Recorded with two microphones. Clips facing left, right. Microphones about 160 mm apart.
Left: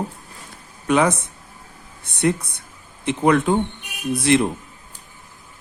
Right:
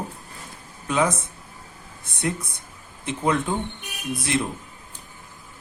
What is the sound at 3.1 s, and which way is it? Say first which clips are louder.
Speech: left 6 dB; 70° left (ahead or behind).